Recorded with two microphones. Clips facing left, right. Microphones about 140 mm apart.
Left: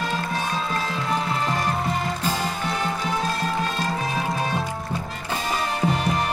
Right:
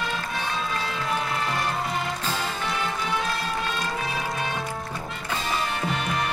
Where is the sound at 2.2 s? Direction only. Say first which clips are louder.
Left 4 dB; 15° left (ahead or behind).